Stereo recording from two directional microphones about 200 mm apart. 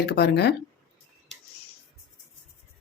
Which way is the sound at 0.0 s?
55° left (ahead or behind).